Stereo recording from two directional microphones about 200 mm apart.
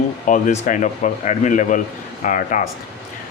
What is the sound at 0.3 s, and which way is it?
A man's voice, 40° left (ahead or behind).